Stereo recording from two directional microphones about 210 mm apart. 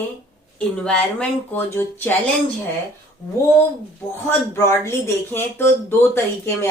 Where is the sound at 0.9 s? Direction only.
5° left (ahead or behind).